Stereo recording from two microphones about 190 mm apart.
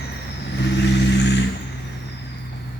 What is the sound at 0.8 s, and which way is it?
Vehicle, 65° left (ahead or behind).